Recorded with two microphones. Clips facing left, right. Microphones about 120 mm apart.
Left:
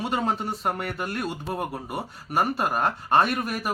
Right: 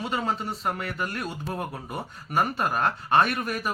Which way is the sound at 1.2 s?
5° left (ahead or behind).